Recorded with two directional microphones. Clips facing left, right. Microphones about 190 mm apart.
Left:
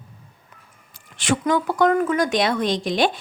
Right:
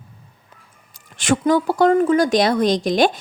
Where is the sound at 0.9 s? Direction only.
45° right (ahead or behind).